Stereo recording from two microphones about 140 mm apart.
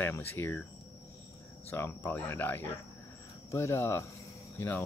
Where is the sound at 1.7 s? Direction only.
15° left (ahead or behind).